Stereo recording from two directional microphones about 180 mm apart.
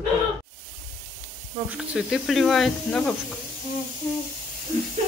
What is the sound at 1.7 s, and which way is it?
Speech, centre (ahead or behind).